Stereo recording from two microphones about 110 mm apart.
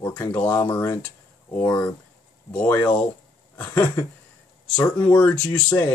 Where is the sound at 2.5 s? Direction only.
15° left (ahead or behind).